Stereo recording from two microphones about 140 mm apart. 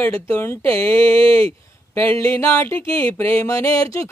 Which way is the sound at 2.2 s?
20° left (ahead or behind).